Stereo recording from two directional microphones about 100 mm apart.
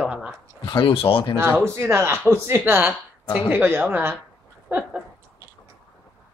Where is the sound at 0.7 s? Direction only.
50° left (ahead or behind); by 1.2 s 65° left (ahead or behind).